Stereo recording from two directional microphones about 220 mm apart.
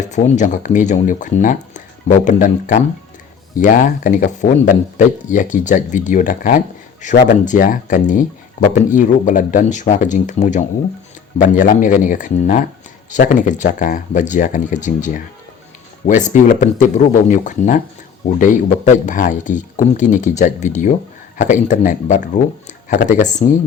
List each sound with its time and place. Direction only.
0.1 s speech: 35° left (ahead or behind)